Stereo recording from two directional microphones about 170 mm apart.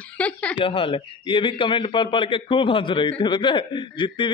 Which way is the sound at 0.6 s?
30° left (ahead or behind).